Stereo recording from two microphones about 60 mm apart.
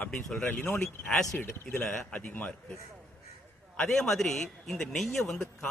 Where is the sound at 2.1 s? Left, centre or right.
Left.